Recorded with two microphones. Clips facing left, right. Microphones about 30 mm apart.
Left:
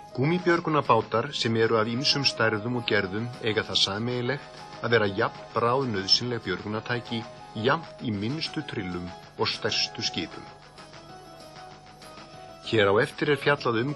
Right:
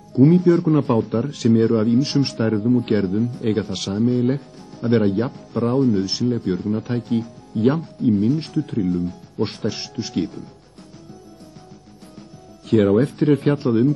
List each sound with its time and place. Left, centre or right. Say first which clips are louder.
0.1 s speech: right 10 dB; left
1.3 s speech: right 8 dB; left
12.6 s speech: right 5 dB; left